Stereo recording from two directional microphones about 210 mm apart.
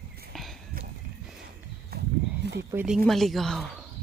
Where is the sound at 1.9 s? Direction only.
50° right (ahead or behind).